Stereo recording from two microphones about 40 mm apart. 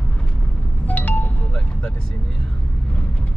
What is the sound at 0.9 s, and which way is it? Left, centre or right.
Wind chime, left.